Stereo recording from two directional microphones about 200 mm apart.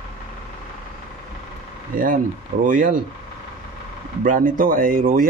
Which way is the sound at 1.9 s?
45° right (ahead or behind).